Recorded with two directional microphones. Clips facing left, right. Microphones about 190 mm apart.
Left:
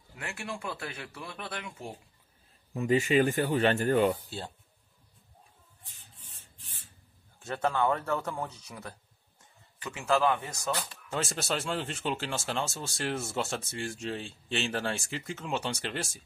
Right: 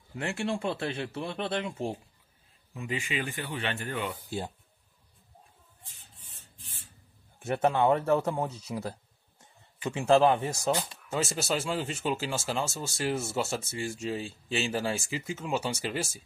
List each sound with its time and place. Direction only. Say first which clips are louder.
0.1 s speech: right 8 dB; 25° right (ahead or behind)
2.7 s speech: left 9 dB; 40° left (ahead or behind)
7.3 s speech: right 4 dB; 20° right (ahead or behind)
11.1 s speech: right 2 dB; centre (ahead or behind)